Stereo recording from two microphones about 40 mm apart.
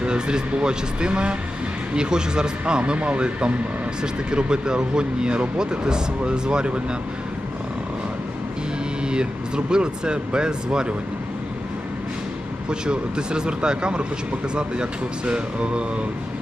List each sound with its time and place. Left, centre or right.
0.0 s speech: right
9.6 s speech: right
12.8 s speech: right